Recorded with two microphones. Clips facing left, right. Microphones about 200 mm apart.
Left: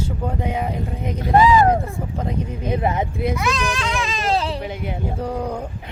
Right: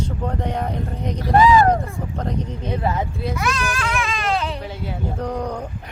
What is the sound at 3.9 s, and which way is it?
Baby cry, 30° left (ahead or behind).